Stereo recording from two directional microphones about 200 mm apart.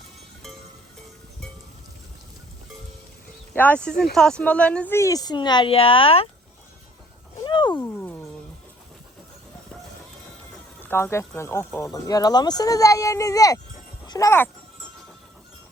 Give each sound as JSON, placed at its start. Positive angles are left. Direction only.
{"t": 3.5, "sound": "speech", "side_deg": 10}
{"t": 7.4, "sound": "wild animals", "side_deg": 25}
{"t": 10.8, "sound": "speech", "side_deg": 10}